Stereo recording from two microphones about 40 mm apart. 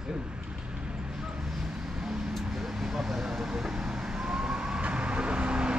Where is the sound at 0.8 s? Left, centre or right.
Right.